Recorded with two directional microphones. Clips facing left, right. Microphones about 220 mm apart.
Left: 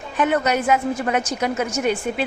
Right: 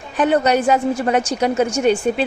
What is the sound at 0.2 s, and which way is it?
A woman's voice, 35° right (ahead or behind).